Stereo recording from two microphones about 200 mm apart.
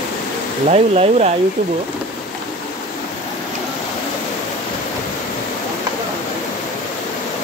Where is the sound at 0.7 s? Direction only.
35° right (ahead or behind).